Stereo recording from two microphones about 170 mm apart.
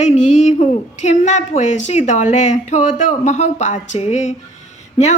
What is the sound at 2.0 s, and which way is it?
A woman's voice, 45° left (ahead or behind).